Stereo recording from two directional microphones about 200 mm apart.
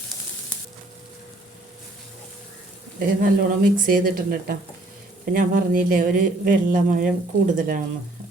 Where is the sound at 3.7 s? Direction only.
45° right (ahead or behind).